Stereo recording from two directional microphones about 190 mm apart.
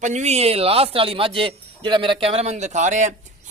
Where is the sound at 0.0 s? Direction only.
35° right (ahead or behind).